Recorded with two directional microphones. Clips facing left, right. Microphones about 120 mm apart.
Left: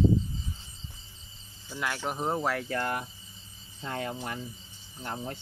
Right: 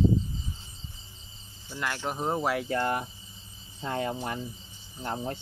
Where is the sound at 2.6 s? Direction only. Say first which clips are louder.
Right 3 dB; 25° right (ahead or behind).